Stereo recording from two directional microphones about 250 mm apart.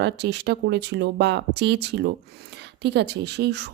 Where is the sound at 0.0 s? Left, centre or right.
Right.